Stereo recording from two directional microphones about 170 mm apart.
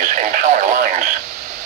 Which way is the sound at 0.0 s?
50° right (ahead or behind).